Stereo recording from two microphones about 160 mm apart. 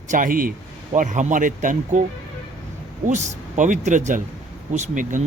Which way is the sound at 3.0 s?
50° right (ahead or behind).